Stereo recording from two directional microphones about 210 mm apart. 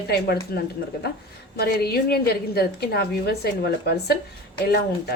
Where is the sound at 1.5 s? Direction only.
50° left (ahead or behind).